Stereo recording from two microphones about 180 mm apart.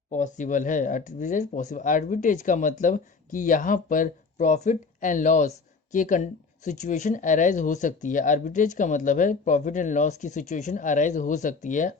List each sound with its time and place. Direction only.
0.1 s speech: 45° left (ahead or behind)